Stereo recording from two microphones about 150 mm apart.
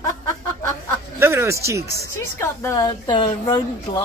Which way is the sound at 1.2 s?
20° right (ahead or behind).